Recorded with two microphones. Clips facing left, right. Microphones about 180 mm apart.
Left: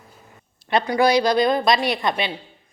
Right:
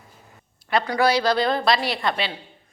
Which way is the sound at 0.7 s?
15° left (ahead or behind).